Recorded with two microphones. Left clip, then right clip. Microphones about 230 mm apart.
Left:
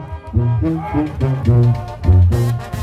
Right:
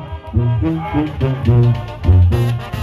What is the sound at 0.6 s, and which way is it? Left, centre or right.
Music, left.